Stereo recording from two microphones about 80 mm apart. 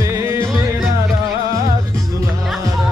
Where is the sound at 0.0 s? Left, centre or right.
Right.